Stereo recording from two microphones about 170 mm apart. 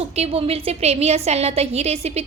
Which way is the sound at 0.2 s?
35° right (ahead or behind).